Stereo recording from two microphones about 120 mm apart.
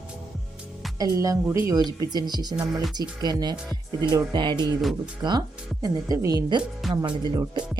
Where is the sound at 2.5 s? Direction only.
5° right (ahead or behind).